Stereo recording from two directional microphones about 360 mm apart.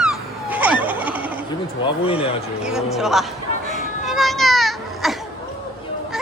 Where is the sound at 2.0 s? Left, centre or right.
Centre.